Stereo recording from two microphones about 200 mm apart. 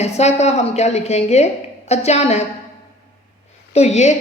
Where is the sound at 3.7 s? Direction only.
35° left (ahead or behind).